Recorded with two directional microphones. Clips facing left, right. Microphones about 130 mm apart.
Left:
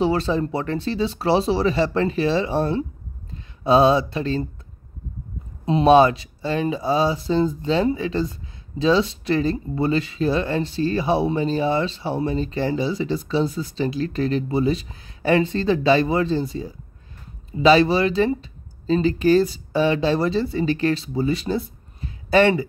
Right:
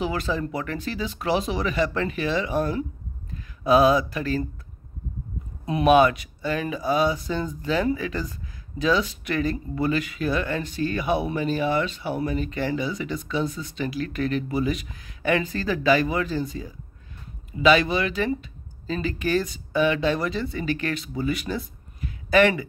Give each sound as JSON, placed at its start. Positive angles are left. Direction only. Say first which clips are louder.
{"t": 0.0, "sound": "speech", "louder": "left 6 dB", "side_deg": 30}
{"t": 5.7, "sound": "speech", "louder": "left 3 dB", "side_deg": 30}